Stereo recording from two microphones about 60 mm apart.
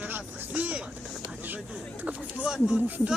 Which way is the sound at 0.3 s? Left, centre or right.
Right.